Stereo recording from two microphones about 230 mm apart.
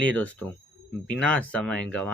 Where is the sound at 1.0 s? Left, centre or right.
Centre.